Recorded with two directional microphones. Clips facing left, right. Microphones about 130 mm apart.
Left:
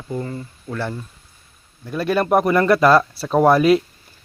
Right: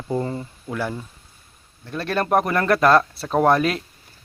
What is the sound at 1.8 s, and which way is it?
Speech, 5° left (ahead or behind).